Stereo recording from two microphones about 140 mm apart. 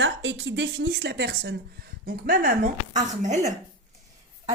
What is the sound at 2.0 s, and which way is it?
Speech, 90° right.